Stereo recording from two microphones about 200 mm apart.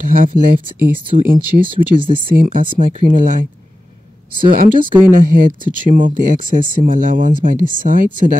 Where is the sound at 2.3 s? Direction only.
45° right (ahead or behind).